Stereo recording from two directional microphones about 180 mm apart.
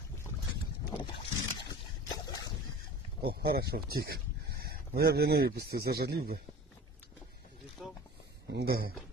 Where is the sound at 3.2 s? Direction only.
60° right (ahead or behind).